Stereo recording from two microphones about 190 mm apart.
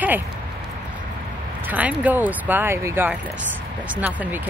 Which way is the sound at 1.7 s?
10° right (ahead or behind).